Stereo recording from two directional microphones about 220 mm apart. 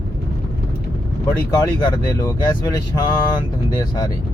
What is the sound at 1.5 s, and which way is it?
Speech, 15° left (ahead or behind).